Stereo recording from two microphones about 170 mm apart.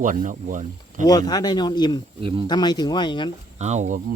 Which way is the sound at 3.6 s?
40° right (ahead or behind).